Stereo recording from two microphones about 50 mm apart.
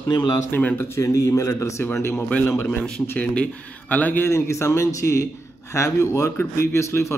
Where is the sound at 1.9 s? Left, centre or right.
Left.